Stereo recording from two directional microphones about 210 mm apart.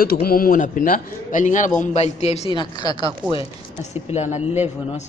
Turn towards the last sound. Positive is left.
turn(degrees=30)  # may be behind; listen again after turning